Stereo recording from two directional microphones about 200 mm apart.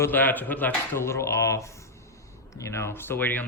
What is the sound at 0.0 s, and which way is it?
Speech, 10° left (ahead or behind).